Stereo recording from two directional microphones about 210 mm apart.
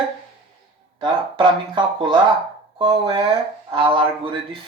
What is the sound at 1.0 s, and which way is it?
Speech, 20° right (ahead or behind).